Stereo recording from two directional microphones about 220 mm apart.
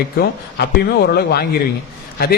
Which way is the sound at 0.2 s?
45° left (ahead or behind).